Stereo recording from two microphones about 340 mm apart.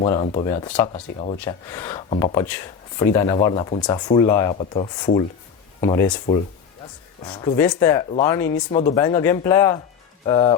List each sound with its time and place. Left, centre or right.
0.0 s speech: centre
7.3 s speech: centre